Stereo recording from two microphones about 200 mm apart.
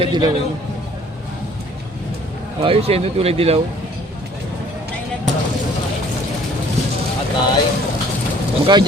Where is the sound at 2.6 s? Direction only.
30° right (ahead or behind).